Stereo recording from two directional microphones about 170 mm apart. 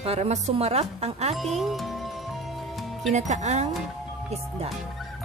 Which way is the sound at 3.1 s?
45° right (ahead or behind).